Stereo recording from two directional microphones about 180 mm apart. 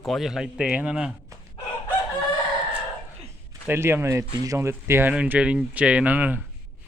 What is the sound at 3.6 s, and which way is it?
Speech, 15° right (ahead or behind).